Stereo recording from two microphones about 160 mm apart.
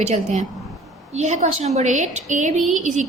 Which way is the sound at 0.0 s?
45° right (ahead or behind).